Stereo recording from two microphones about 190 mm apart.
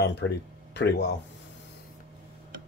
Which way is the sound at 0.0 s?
65° left (ahead or behind).